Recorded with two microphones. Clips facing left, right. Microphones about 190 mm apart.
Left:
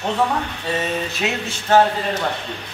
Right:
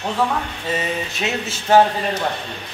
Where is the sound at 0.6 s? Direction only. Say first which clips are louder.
Left 1 dB; 20° right (ahead or behind).